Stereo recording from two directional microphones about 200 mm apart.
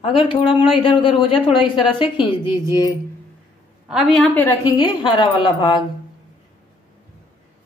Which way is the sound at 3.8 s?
Centre (ahead or behind).